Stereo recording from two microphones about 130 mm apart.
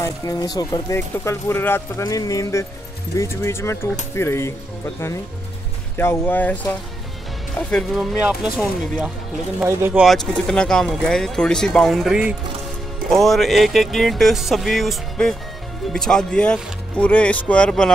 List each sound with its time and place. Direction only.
0.0 s speech: 30° left (ahead or behind)
5.9 s speech: 15° left (ahead or behind)
7.7 s speech: centre (ahead or behind)
9.7 s speech: 20° right (ahead or behind)
9.9 s speech: centre (ahead or behind)